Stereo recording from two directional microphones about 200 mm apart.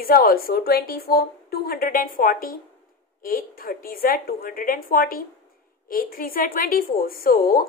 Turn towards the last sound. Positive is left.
turn(degrees=45)  # may be behind; listen again after turning